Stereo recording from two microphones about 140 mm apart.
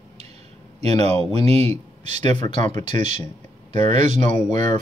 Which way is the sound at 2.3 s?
30° left (ahead or behind).